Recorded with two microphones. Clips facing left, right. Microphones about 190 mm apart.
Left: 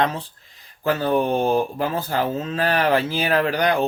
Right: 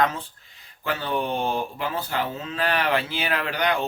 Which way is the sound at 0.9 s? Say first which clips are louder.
Left 7 dB; 40° left (ahead or behind).